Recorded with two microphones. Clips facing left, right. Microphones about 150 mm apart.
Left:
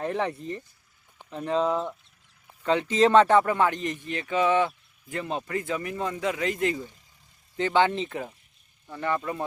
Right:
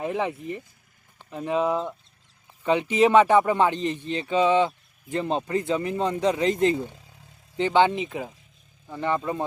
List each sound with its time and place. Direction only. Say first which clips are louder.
0.0 s speech: right 1 dB; 10° right (ahead or behind); by 6.8 s 30° right (ahead or behind)
6.8 s vehicle: right 6 dB; 75° right (ahead or behind)
7.5 s speech: right 3 dB; 20° right (ahead or behind)